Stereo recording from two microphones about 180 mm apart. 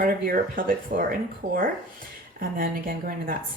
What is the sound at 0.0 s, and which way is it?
Speech, 50° right (ahead or behind).